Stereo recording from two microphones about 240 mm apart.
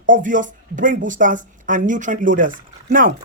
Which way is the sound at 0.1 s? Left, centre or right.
Right.